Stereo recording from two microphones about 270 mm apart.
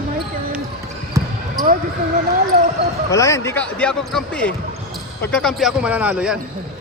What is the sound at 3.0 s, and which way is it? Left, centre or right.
Speech, centre.